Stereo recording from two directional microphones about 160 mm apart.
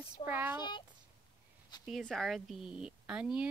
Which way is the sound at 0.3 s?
10° right (ahead or behind).